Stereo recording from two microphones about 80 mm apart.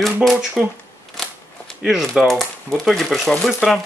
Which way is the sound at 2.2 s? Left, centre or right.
Centre.